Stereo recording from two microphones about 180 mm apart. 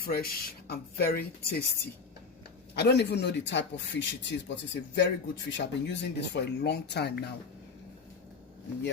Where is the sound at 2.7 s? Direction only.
65° left (ahead or behind).